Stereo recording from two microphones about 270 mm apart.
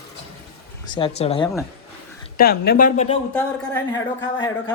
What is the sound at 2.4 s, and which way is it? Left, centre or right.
Speech, left.